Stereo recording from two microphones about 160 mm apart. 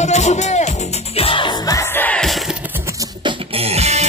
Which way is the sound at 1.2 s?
35° left (ahead or behind).